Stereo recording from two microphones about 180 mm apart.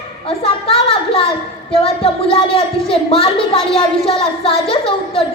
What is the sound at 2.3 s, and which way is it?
Speech, 30° left (ahead or behind).